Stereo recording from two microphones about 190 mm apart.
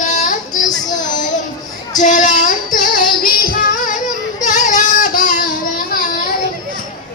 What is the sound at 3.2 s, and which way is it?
Music, 45° left (ahead or behind).